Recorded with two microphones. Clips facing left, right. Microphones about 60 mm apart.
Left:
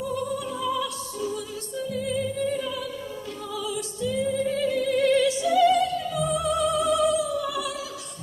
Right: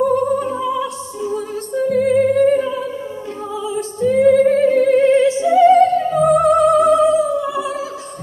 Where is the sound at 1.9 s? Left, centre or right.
Right.